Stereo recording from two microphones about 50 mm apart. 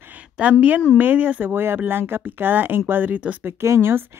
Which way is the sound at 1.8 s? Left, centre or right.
Right.